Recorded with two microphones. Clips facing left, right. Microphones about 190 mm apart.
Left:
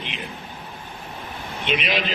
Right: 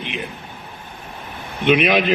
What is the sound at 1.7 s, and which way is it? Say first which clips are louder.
Speech: right 9 dB; 55° right (ahead or behind).